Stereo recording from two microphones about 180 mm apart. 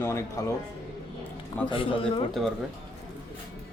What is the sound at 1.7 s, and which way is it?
Speech, 30° left (ahead or behind).